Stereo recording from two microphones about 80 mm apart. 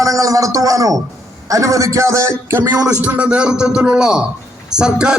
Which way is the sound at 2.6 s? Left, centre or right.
Right.